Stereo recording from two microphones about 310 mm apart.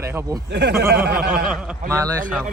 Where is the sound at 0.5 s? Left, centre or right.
Right.